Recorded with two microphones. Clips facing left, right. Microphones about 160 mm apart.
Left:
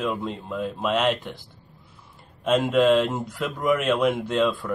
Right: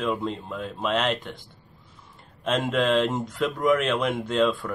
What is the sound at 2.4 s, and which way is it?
Speech, 5° left (ahead or behind).